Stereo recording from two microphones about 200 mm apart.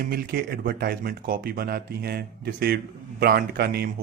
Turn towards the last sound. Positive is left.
turn(degrees=-50)  # may be behind; listen again after turning